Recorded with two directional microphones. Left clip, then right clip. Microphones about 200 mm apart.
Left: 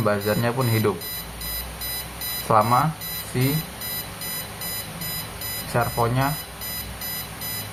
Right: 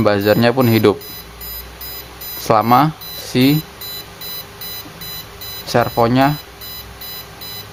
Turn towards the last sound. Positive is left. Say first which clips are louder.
# right 9 dB
turn(degrees=-55)  # may be behind; listen again after turning